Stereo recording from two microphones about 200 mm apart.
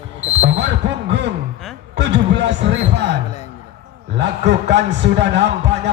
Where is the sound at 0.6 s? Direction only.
60° right (ahead or behind).